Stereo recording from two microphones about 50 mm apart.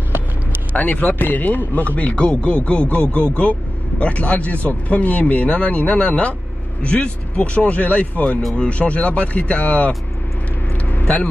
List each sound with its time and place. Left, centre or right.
0.7 s speech: left
10.9 s vehicle: left